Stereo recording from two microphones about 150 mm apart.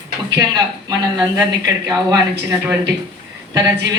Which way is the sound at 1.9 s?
20° right (ahead or behind).